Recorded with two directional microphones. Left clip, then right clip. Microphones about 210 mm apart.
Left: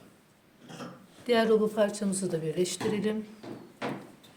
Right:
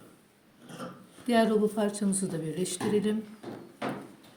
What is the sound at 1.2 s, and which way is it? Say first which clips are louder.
A woman's voice: left 1 dB; 45° left (ahead or behind).